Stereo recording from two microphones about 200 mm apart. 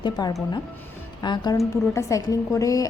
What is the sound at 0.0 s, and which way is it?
A woman's voice, 20° left (ahead or behind).